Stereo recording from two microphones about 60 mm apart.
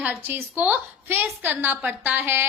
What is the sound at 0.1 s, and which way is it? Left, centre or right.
A woman's voice, right.